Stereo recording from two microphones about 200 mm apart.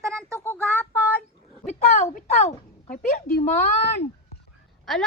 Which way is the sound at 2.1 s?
40° left (ahead or behind).